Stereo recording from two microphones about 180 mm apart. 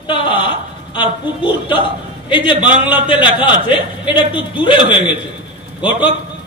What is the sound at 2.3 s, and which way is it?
A man's voice, 25° left (ahead or behind).